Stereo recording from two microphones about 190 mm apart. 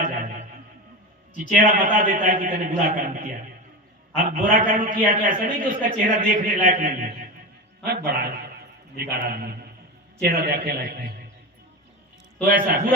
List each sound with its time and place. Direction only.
0.0 s music: 45° right (ahead or behind)
1.4 s a man's voice: 45° right (ahead or behind)
12.5 s a man's voice: 45° right (ahead or behind)